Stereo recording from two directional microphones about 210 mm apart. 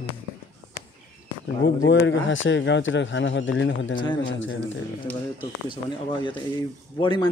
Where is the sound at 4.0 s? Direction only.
20° left (ahead or behind).